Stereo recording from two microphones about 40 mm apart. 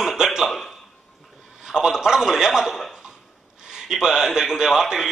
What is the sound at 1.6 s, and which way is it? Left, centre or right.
A man's voice, centre.